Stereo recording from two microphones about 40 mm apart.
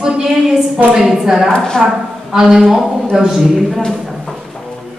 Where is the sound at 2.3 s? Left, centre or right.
Centre.